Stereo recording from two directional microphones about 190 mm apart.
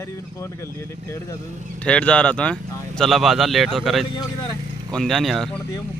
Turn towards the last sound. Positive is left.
turn(degrees=0)  # may be behind; listen again after turning